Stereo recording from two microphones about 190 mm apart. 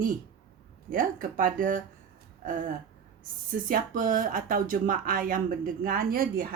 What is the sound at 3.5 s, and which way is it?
Speech, 45° right (ahead or behind).